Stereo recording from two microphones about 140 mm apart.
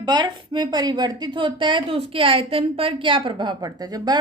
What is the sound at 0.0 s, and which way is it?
Speech, 30° right (ahead or behind).